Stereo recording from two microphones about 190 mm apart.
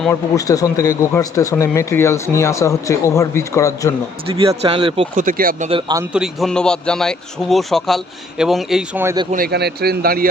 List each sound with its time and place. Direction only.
0.1 s speech: 15° left (ahead or behind)
4.3 s speech: 30° right (ahead or behind)
5.1 s speech: 45° right (ahead or behind)
6.1 s speech: centre (ahead or behind)
9.3 s speech: 55° right (ahead or behind)